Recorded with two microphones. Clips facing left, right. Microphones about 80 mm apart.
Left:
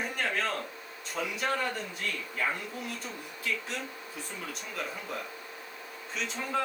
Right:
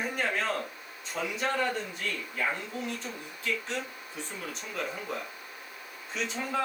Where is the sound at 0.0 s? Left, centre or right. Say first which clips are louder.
Right 1 dB; centre.